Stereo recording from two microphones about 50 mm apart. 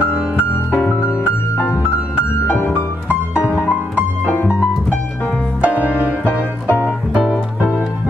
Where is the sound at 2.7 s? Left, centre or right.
Right.